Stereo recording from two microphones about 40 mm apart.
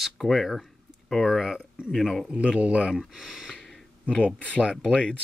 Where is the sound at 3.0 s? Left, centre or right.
Centre.